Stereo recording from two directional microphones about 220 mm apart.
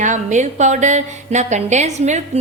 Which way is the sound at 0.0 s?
35° right (ahead or behind).